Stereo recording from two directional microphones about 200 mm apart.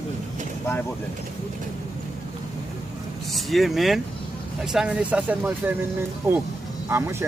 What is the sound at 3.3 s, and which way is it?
Speech, centre (ahead or behind).